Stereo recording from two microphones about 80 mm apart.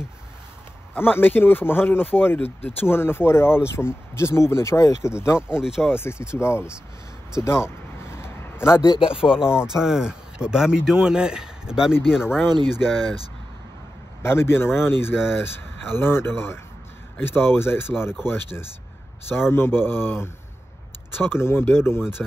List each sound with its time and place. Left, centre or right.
0.9 s speech: left
5.5 s speech: centre
5.9 s speech: left
7.4 s a sound: left
8.8 s speech: left
9.2 s speech: centre
12.4 s speech: right
12.7 s speech: centre
14.2 s speech: left